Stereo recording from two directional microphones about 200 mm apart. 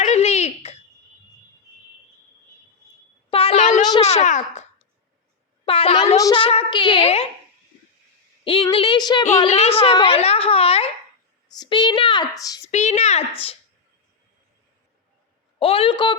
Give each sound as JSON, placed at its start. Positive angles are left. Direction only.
{"t": 0.0, "sound": "a sound", "side_deg": 35}
{"t": 3.2, "sound": "a sound", "side_deg": 30}
{"t": 4.0, "sound": "a child's voice", "side_deg": 35}
{"t": 5.6, "sound": "a woman's voice", "side_deg": 30}
{"t": 6.1, "sound": "a woman's voice", "side_deg": 20}
{"t": 8.4, "sound": "a woman's voice", "side_deg": 25}
{"t": 12.6, "sound": "speech", "side_deg": 35}
{"t": 15.5, "sound": "a woman's voice", "side_deg": 30}